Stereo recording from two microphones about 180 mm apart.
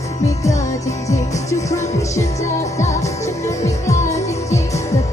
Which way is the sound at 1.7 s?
15° left (ahead or behind).